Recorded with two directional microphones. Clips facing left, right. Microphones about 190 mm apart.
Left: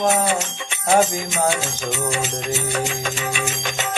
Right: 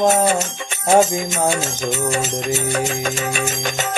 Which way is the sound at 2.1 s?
45° right (ahead or behind).